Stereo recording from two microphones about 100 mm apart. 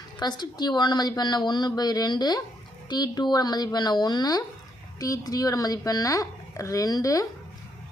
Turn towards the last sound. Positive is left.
turn(degrees=35)  # may be behind; listen again after turning